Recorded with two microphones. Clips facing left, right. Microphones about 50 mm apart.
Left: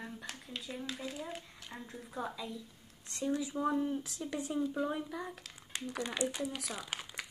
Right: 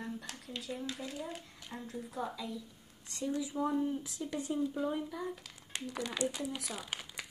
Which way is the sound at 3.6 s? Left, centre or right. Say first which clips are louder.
Right 1 dB; centre.